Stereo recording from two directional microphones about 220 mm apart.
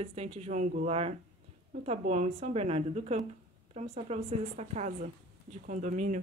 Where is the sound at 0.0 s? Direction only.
30° right (ahead or behind).